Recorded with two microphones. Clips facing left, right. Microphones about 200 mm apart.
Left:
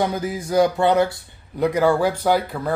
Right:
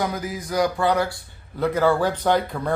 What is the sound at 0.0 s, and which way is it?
Speech, 30° left (ahead or behind).